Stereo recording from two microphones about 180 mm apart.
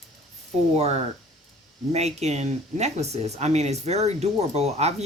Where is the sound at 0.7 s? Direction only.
35° right (ahead or behind).